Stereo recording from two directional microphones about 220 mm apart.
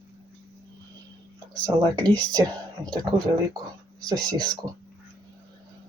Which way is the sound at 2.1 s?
20° right (ahead or behind).